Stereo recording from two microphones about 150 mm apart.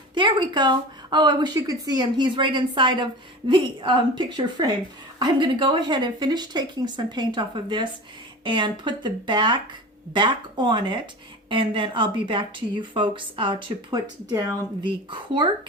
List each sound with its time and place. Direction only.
0.1 s a woman's voice: 30° right (ahead or behind)